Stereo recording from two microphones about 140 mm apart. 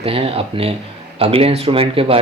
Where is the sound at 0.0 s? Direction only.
45° right (ahead or behind).